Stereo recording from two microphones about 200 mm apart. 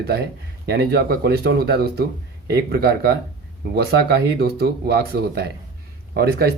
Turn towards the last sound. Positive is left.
turn(degrees=-50)  # may be behind; listen again after turning